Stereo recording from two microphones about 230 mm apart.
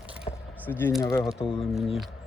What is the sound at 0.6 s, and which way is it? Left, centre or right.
Speech, centre.